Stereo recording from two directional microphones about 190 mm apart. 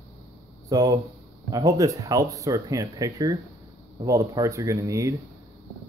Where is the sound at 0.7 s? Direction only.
20° right (ahead or behind).